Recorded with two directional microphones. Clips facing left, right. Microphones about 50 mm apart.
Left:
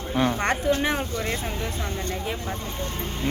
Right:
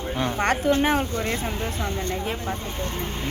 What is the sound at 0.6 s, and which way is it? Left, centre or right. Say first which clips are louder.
A woman's voice: right 3 dB; right.